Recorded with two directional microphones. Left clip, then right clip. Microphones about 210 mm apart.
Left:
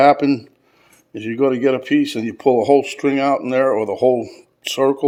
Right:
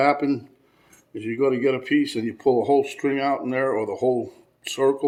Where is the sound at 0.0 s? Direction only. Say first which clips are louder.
Left 8 dB; 40° left (ahead or behind).